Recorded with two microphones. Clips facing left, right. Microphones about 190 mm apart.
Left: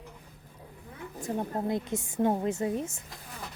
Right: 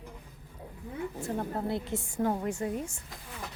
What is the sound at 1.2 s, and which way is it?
A woman's voice, 15° left (ahead or behind).